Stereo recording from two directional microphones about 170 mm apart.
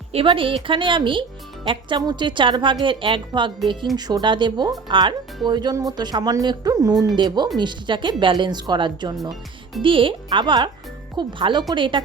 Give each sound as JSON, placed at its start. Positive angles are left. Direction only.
{"t": 0.1, "sound": "a woman's voice", "side_deg": -35}